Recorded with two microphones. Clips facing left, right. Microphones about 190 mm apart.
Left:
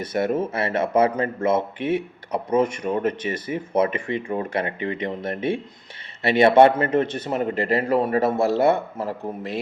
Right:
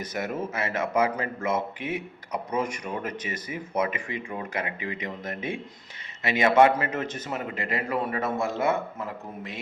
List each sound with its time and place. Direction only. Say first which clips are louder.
0.0 s a man's voice: left 8 dB; 30° left (ahead or behind)